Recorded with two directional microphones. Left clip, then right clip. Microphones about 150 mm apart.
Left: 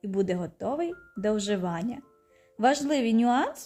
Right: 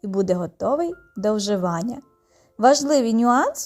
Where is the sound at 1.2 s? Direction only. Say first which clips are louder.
Right 6 dB; 5° right (ahead or behind).